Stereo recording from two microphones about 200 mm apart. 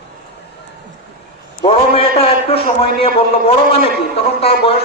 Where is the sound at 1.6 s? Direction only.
30° left (ahead or behind).